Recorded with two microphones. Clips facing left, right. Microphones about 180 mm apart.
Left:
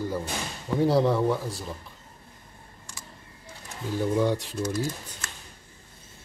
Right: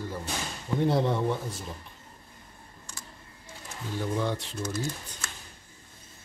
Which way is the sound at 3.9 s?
10° left (ahead or behind).